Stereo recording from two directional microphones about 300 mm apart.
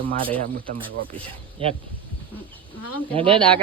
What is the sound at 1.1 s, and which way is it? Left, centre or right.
Speech, centre.